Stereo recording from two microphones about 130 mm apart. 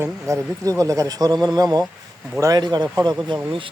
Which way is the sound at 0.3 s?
25° right (ahead or behind).